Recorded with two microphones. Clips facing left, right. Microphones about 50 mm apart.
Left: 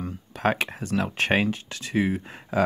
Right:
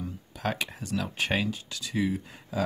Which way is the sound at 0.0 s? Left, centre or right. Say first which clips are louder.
Left 7 dB; left.